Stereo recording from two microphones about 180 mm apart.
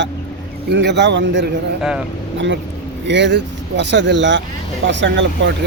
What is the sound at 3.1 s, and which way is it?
Speech, 75° right (ahead or behind).